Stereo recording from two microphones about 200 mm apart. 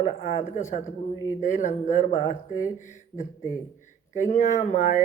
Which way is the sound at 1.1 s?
15° right (ahead or behind).